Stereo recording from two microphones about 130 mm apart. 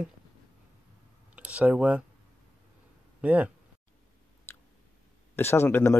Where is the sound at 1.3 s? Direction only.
10° right (ahead or behind).